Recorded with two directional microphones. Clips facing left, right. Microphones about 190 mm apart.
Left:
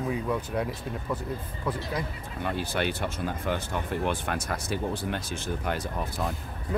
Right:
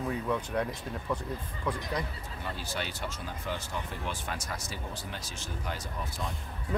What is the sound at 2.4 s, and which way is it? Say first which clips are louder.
Speech: left 8 dB; 60° left (ahead or behind).